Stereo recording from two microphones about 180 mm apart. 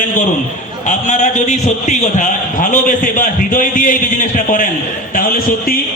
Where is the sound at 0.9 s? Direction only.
45° left (ahead or behind).